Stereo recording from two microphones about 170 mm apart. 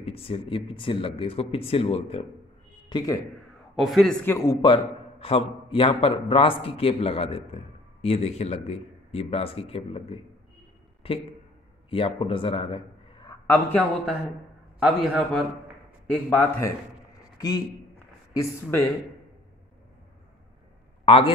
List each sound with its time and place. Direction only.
0.0 s a man's voice: 35° left (ahead or behind)
2.9 s a man's voice: 25° left (ahead or behind)
3.7 s a man's voice: centre (ahead or behind)
4.3 s a man's voice: 20° left (ahead or behind)
14.8 s a man's voice: centre (ahead or behind); by 18.8 s 15° left (ahead or behind)
21.0 s a sound: 30° left (ahead or behind)